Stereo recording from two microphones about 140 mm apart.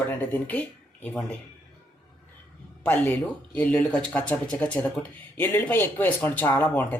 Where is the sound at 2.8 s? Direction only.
10° left (ahead or behind).